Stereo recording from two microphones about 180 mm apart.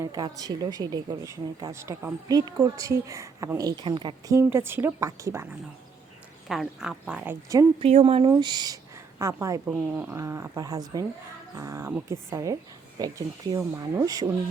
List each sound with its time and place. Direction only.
0.0 s a woman's voice: 20° right (ahead or behind)
6.5 s speech: centre (ahead or behind)
7.8 s a woman's voice: 30° right (ahead or behind)